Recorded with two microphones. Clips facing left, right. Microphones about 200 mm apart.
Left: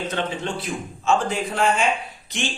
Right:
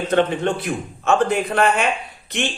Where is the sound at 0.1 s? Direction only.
60° right (ahead or behind).